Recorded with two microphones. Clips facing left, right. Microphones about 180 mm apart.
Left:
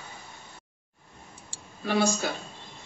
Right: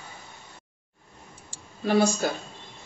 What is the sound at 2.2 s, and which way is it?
Speech, 45° right (ahead or behind).